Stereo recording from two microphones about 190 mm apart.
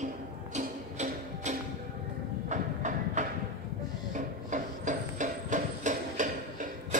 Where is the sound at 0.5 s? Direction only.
40° right (ahead or behind).